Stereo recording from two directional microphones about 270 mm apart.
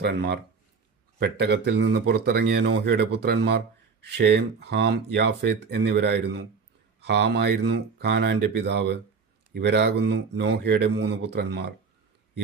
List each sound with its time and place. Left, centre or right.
0.0 s speech: right